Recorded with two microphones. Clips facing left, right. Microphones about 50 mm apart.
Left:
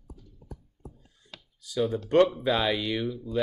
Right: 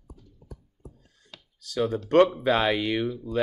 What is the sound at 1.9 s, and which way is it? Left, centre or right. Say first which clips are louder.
Speech: right 3 dB; right.